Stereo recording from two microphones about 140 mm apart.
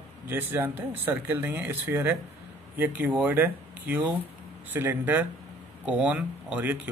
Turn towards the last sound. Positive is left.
turn(degrees=-10)  # may be behind; listen again after turning